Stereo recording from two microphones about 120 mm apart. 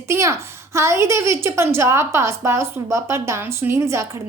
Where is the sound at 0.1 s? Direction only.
25° right (ahead or behind).